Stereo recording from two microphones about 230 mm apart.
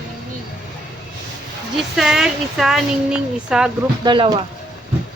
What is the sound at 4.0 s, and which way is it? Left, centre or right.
Speech, centre.